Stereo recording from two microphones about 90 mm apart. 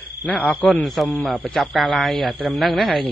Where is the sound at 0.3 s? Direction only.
15° left (ahead or behind).